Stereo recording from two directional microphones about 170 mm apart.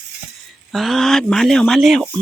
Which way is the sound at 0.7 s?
Centre (ahead or behind).